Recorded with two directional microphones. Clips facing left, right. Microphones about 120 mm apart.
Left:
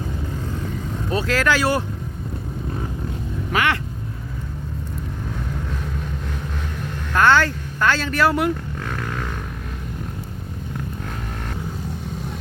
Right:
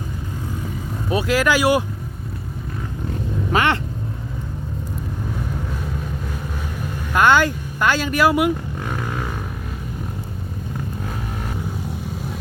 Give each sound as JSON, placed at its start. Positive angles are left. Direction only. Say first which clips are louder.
{"t": 1.1, "sound": "speech", "louder": "right 2 dB", "side_deg": -10}
{"t": 3.5, "sound": "speech", "louder": "right 2 dB", "side_deg": -30}
{"t": 7.1, "sound": "vehicle", "louder": "right 1 dB", "side_deg": -15}